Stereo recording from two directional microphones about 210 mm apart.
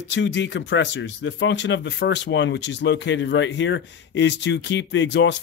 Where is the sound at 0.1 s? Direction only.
60° left (ahead or behind).